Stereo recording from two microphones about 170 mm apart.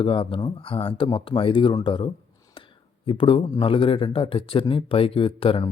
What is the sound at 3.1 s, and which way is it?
Speech, 30° left (ahead or behind).